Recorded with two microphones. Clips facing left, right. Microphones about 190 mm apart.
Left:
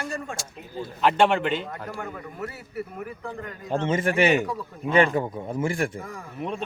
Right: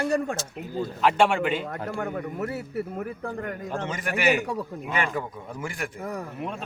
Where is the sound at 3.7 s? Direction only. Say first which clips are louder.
Left 10 dB; 25° left (ahead or behind).